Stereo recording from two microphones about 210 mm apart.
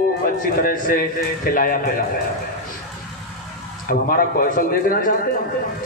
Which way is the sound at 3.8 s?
40° left (ahead or behind).